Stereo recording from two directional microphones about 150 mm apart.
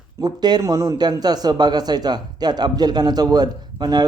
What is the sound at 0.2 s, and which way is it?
A man's voice, 30° right (ahead or behind).